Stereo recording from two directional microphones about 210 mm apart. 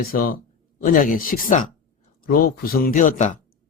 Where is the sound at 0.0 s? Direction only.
45° left (ahead or behind).